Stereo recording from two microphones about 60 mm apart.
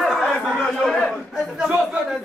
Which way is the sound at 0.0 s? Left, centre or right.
Centre.